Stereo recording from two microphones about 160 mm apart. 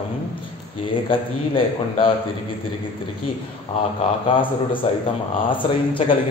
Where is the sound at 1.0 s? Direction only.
35° left (ahead or behind).